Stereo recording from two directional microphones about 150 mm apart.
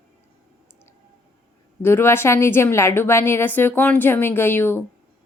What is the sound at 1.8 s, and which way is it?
Speech, 15° left (ahead or behind).